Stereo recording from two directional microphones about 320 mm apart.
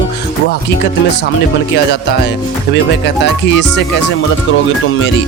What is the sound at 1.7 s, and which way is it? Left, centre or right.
Speech, left.